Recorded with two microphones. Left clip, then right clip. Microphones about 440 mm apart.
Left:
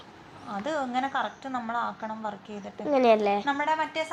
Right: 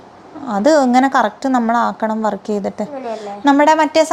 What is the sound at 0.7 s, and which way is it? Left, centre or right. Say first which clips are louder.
Speech: right 15 dB; right.